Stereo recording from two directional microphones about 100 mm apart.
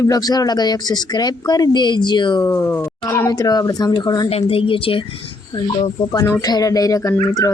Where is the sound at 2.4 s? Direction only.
25° left (ahead or behind); by 4.3 s 45° left (ahead or behind).